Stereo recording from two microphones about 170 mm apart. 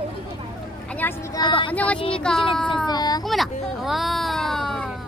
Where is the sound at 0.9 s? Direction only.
10° left (ahead or behind).